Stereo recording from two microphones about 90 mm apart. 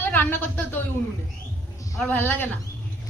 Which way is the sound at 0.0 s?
25° left (ahead or behind).